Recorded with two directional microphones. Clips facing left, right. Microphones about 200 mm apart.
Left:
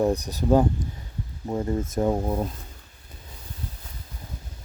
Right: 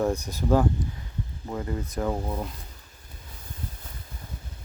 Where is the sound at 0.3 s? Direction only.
15° left (ahead or behind).